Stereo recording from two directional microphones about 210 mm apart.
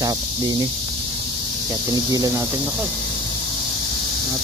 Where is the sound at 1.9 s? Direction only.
20° right (ahead or behind).